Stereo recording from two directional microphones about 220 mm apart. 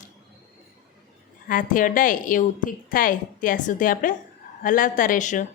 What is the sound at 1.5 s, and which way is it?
A woman's voice, 40° left (ahead or behind).